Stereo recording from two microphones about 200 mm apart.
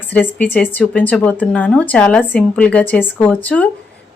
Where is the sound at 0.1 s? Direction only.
10° left (ahead or behind).